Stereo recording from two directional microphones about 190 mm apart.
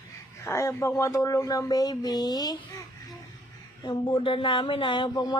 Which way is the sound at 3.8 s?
25° left (ahead or behind).